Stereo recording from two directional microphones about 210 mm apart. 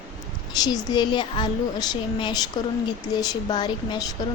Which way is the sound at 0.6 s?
20° left (ahead or behind).